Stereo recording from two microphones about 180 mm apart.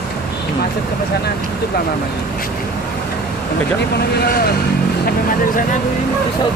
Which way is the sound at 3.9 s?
65° left (ahead or behind).